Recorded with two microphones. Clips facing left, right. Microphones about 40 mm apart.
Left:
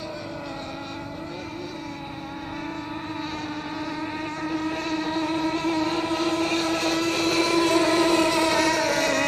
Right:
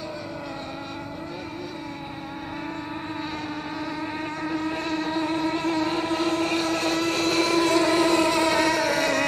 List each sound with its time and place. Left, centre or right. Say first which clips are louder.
4.2 s motorboat: even; centre
5.3 s vehicle: even; centre
8.0 s vehicle: even; centre; by 9.2 s right